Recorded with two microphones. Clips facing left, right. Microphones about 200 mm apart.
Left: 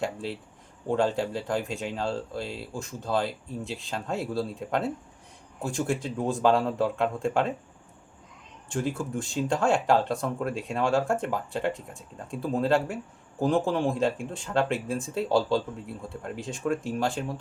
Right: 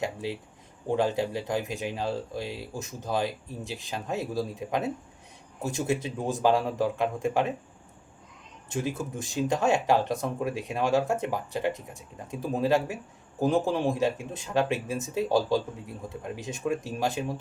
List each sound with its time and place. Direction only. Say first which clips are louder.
0.0 s speech: even; 15° right (ahead or behind)
5.8 s speech: left 1 dB; 20° right (ahead or behind)
8.8 s speech: left 2 dB; 15° right (ahead or behind)